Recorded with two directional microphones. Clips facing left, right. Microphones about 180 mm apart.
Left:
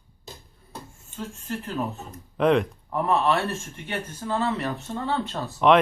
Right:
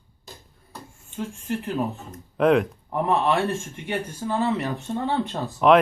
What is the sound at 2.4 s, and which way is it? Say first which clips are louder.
Speech: right 2 dB; 5° right (ahead or behind).